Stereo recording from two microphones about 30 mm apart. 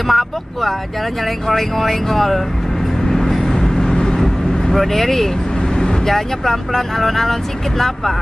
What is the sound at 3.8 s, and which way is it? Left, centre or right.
Vehicle, left.